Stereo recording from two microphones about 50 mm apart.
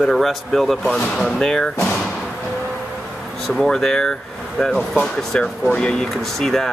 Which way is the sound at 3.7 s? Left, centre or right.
Centre.